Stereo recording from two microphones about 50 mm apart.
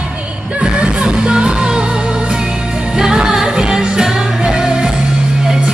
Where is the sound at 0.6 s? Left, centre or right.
Centre.